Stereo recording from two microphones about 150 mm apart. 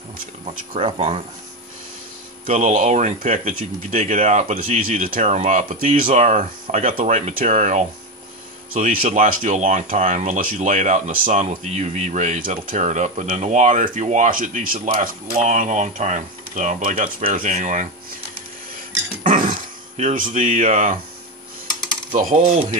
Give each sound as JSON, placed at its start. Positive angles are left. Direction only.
{"t": 0.7, "sound": "speech", "side_deg": -40}
{"t": 2.4, "sound": "speech", "side_deg": -55}
{"t": 19.2, "sound": "speech", "side_deg": -60}
{"t": 22.2, "sound": "speech", "side_deg": -60}